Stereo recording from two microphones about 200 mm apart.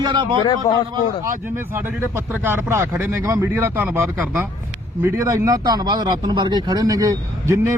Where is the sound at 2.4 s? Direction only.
10° right (ahead or behind).